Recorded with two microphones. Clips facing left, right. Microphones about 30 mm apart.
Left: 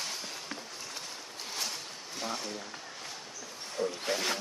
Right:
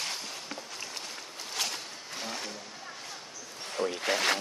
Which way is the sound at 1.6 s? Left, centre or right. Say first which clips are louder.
Right 4 dB; right.